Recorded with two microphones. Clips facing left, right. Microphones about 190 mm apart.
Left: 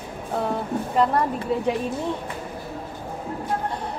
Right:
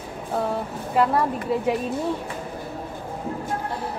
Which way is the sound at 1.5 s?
Centre (ahead or behind).